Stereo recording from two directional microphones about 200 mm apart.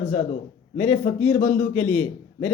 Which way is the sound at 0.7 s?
10° left (ahead or behind).